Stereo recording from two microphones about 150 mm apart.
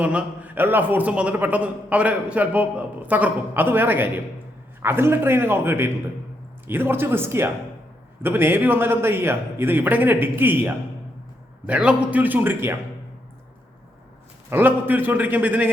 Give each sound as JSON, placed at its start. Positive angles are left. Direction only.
{"t": 0.0, "sound": "a man's voice", "side_deg": -10}
{"t": 14.5, "sound": "a man's voice", "side_deg": -10}